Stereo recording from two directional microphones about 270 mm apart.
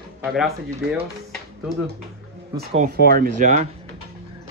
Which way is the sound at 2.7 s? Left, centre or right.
Right.